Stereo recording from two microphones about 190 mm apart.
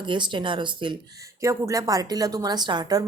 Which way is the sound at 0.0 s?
25° right (ahead or behind).